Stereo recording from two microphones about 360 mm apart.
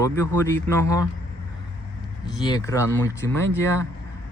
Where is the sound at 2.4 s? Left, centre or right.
Centre.